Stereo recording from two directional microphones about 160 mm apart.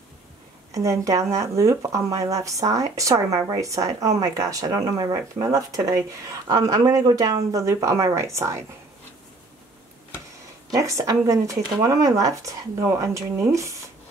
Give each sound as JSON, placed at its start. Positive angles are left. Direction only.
{"t": 0.7, "sound": "speech", "side_deg": -20}
{"t": 10.7, "sound": "speech", "side_deg": -20}